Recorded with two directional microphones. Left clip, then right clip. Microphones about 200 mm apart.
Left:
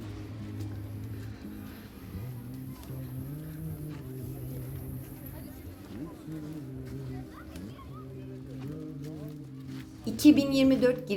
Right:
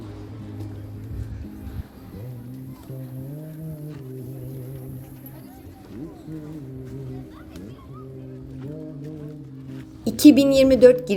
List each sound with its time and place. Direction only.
10.0 s a woman's voice: 35° right (ahead or behind)